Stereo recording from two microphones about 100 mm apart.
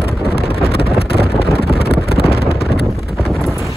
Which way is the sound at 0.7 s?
75° left (ahead or behind).